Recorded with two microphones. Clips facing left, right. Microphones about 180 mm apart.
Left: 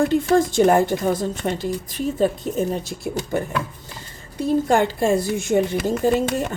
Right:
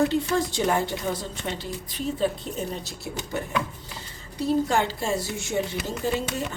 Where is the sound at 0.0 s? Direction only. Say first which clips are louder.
Left 6 dB; 50° left (ahead or behind).